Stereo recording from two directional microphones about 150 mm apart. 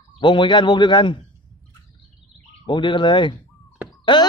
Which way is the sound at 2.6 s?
30° left (ahead or behind).